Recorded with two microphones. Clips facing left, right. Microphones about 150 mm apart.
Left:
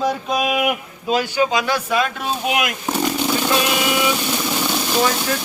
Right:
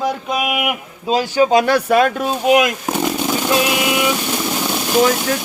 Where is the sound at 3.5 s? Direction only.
15° right (ahead or behind).